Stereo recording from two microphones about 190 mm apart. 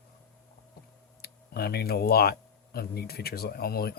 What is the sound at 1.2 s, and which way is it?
Speech, 55° left (ahead or behind).